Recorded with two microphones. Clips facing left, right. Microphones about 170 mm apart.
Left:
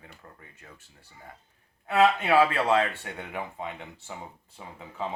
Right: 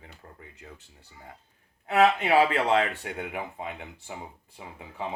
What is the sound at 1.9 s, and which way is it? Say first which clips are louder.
Speech: even; 20° right (ahead or behind).